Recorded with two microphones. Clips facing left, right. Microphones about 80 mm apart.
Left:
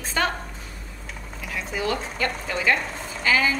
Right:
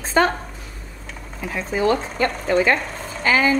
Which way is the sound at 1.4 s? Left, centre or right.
Right.